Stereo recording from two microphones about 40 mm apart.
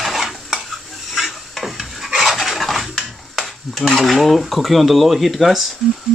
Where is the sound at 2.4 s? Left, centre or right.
Centre.